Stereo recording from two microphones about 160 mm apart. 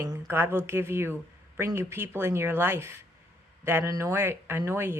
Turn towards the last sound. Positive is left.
turn(degrees=-15)  # may be behind; listen again after turning